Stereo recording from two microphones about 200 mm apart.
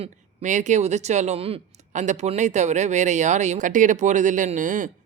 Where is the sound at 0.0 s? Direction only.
35° right (ahead or behind).